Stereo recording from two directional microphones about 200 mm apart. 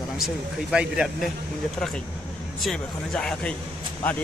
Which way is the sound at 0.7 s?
5° right (ahead or behind).